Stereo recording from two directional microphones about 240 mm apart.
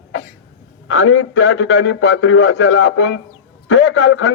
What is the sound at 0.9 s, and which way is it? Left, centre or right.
A man's voice, left.